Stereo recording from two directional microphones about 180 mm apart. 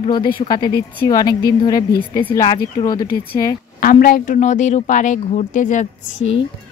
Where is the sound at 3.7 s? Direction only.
55° left (ahead or behind).